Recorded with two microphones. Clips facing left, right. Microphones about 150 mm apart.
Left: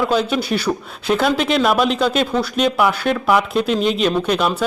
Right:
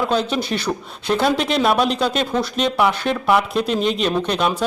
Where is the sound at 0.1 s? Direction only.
5° left (ahead or behind).